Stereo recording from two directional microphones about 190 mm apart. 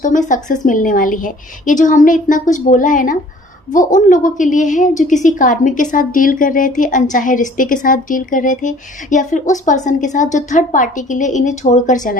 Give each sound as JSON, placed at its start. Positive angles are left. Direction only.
{"t": 0.0, "sound": "a woman's voice", "side_deg": 40}